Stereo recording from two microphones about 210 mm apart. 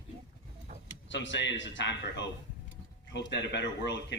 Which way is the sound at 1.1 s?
60° left (ahead or behind).